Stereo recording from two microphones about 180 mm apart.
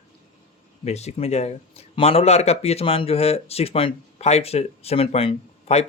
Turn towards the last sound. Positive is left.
turn(degrees=35)  # may be behind; listen again after turning